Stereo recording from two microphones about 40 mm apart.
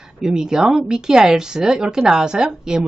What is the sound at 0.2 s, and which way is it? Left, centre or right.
A woman's voice, centre.